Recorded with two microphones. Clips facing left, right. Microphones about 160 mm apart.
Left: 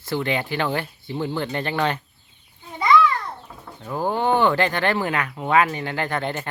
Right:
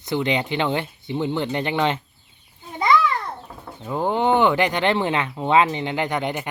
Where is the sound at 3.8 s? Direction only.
20° right (ahead or behind).